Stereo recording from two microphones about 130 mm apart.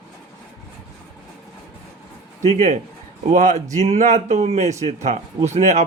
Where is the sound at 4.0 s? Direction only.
65° right (ahead or behind).